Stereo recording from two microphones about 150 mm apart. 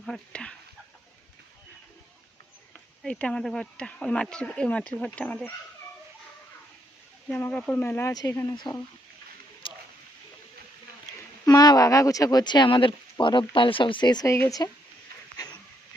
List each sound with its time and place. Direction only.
0.0 s speech: 5° left (ahead or behind)
3.0 s speech: 5° left (ahead or behind)
7.3 s speech: 10° left (ahead or behind); by 8.8 s 30° left (ahead or behind)
9.6 s a sound: 35° left (ahead or behind)
11.2 s speech: 25° left (ahead or behind)
15.4 s a sound: 25° left (ahead or behind)